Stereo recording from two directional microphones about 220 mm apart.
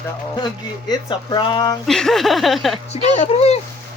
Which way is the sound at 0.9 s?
20° left (ahead or behind).